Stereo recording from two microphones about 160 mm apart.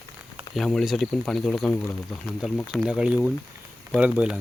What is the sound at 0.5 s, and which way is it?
Speech, centre (ahead or behind).